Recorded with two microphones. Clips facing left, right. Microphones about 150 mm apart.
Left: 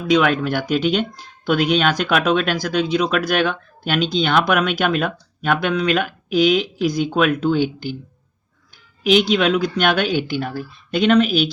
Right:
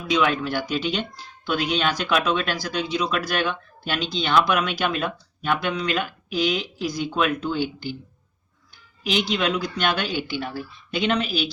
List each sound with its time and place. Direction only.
0.1 s speech: 55° left (ahead or behind)
9.3 s speech: 80° left
9.6 s speech: 55° left (ahead or behind)